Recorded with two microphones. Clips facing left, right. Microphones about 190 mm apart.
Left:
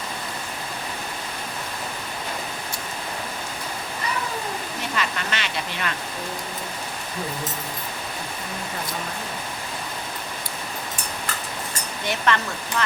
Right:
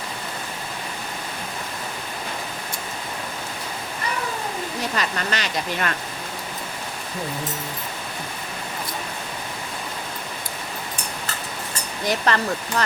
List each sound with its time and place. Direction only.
4.9 s speech: 40° right (ahead or behind)
12.0 s speech: 40° right (ahead or behind)